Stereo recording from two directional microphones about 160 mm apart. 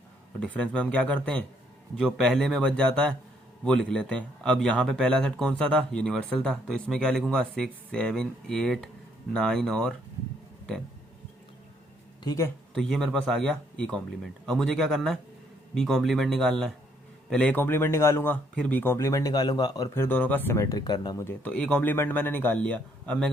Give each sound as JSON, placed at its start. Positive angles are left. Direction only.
{"t": 0.3, "sound": "speech", "side_deg": 5}
{"t": 12.2, "sound": "speech", "side_deg": 20}
{"t": 12.7, "sound": "speech", "side_deg": 0}
{"t": 21.2, "sound": "speech", "side_deg": 10}